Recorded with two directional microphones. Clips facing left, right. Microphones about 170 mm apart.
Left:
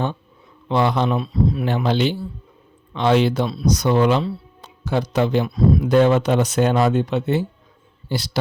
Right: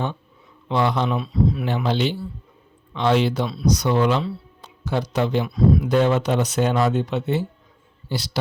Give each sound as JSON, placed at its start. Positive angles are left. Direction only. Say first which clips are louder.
{"t": 0.7, "sound": "speech", "louder": "left 2 dB", "side_deg": 55}
{"t": 1.0, "sound": "speech", "louder": "left 1 dB", "side_deg": 40}